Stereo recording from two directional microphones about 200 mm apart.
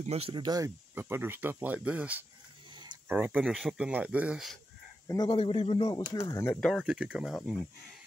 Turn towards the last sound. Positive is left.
turn(degrees=0)  # may be behind; listen again after turning